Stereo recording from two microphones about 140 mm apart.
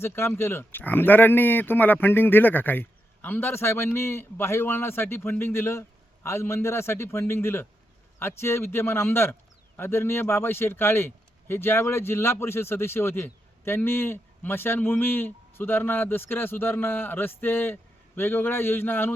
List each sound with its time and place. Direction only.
0.0 s a man's voice: 15° left (ahead or behind)